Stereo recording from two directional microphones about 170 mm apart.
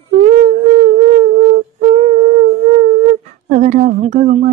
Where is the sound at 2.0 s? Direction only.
40° right (ahead or behind).